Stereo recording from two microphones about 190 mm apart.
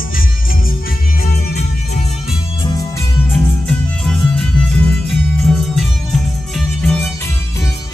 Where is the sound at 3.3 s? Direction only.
5° left (ahead or behind).